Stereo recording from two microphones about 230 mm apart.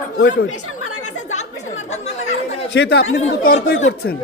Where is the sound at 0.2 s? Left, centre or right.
Left.